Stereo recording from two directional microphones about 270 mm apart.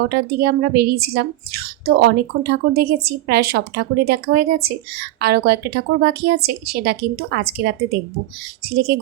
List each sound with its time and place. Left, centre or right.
0.1 s speech: right